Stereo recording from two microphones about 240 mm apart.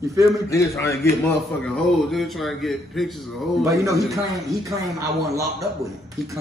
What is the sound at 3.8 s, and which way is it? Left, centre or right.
Speech, centre.